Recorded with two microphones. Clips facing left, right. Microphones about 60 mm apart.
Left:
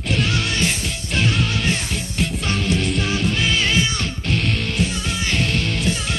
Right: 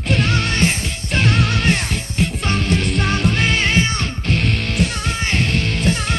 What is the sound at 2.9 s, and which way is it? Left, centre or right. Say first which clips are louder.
Music: right 3 dB; right.